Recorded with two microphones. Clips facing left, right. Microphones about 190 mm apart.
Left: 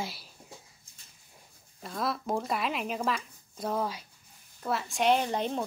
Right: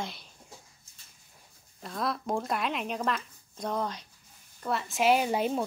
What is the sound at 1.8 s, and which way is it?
Speech, centre (ahead or behind).